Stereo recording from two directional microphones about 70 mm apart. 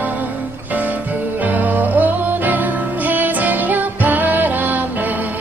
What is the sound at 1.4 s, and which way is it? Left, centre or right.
Music, right.